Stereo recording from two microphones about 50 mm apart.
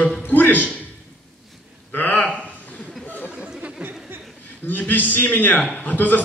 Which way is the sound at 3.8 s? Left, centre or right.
Right.